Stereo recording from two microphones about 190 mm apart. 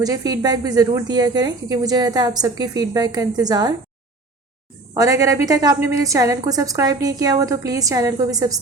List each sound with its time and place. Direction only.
0.0 s a woman's voice: 20° right (ahead or behind)
4.9 s a woman's voice: 15° right (ahead or behind)